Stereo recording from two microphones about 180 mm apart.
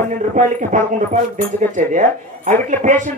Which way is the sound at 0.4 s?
45° right (ahead or behind).